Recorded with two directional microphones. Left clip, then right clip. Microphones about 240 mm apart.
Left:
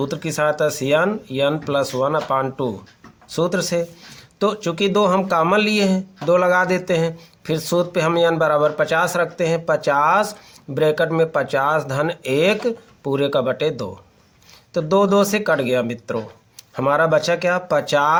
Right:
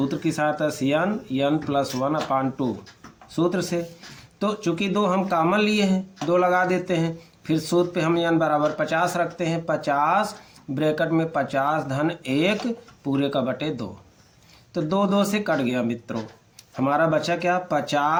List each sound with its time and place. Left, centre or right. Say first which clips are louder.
0.1 s speech: left 4 dB; left